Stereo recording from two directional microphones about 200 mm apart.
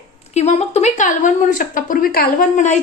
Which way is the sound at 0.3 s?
35° left (ahead or behind).